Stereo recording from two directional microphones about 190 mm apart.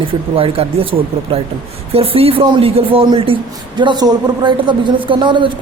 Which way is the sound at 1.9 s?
30° right (ahead or behind).